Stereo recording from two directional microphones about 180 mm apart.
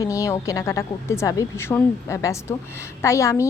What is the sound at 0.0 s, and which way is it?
Speech, 15° left (ahead or behind).